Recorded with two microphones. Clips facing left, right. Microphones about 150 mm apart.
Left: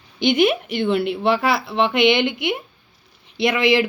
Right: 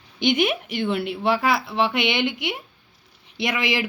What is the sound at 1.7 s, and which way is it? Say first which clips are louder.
Speech: left 6 dB; 70° left (ahead or behind).